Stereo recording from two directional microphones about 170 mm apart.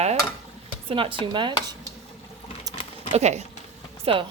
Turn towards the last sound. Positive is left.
turn(degrees=-30)  # may be behind; listen again after turning